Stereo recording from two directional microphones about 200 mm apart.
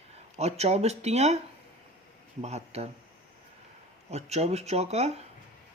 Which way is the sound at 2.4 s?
30° right (ahead or behind).